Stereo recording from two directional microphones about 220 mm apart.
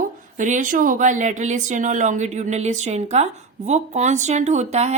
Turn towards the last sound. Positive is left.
turn(degrees=-30)  # may be behind; listen again after turning